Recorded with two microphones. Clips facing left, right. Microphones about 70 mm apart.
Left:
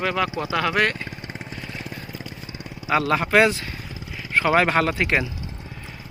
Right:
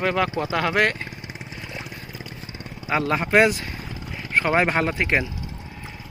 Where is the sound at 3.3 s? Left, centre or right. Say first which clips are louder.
Right 1 dB; centre.